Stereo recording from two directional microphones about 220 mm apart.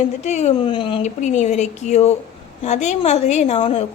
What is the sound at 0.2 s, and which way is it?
A woman's voice, 30° left (ahead or behind).